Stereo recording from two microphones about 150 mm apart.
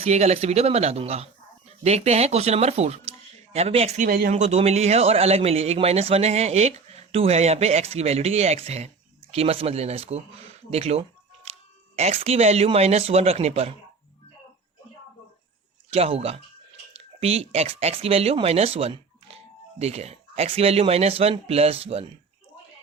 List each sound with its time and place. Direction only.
0.0 s a man's voice: 45° right (ahead or behind)
11.5 s music: 45° right (ahead or behind)
11.9 s a man's voice: 45° right (ahead or behind)
15.9 s a man's voice: 45° right (ahead or behind)